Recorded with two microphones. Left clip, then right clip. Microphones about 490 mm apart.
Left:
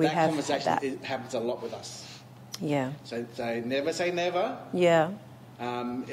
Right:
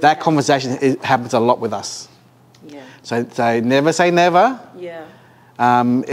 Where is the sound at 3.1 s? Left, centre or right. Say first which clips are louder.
Right 15 dB; right.